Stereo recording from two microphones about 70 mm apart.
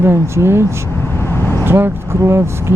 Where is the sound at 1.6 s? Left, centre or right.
Right.